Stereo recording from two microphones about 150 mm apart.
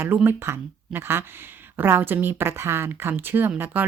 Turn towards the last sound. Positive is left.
turn(degrees=-10)  # may be behind; listen again after turning